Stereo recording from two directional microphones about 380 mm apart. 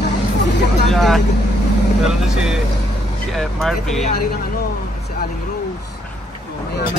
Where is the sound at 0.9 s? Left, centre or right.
Centre.